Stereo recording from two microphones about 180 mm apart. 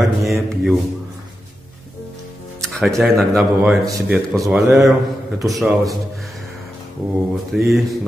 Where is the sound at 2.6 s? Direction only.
Centre (ahead or behind).